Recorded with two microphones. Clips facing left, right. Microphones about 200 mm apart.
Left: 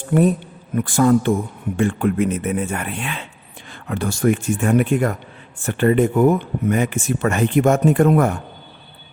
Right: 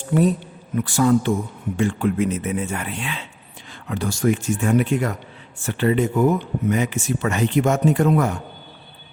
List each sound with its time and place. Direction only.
0.1 s speech: 55° left (ahead or behind)